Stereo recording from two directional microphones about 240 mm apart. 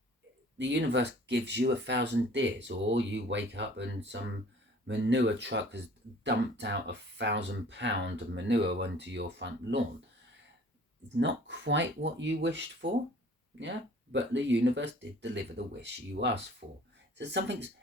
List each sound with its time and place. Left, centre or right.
0.6 s speech: right
11.2 s speech: right
16.6 s speech: right
17.2 s speech: right